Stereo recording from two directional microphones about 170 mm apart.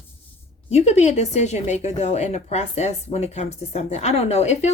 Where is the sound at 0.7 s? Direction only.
40° left (ahead or behind).